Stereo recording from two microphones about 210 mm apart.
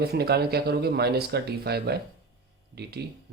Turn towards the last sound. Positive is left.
turn(degrees=-50)  # may be behind; listen again after turning